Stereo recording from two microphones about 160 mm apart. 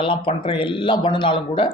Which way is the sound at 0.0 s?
35° left (ahead or behind).